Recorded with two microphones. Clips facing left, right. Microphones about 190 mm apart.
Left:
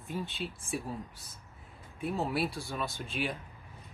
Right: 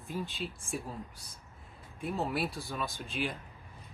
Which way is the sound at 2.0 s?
Centre (ahead or behind).